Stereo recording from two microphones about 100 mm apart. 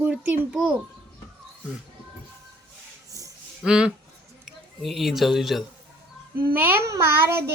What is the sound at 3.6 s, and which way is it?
A child's voice, 10° right (ahead or behind).